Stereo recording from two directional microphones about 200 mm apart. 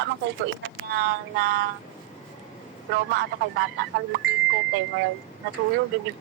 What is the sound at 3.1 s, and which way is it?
Speech, 55° right (ahead or behind).